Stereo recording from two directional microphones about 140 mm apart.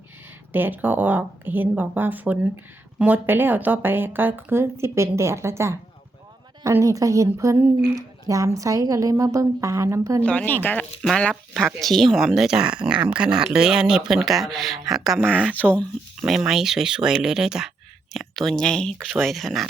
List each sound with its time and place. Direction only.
0.5 s a woman's voice: 15° right (ahead or behind)
10.2 s speech: 10° left (ahead or behind)